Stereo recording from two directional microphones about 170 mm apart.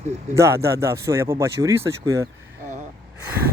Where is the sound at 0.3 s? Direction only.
15° right (ahead or behind).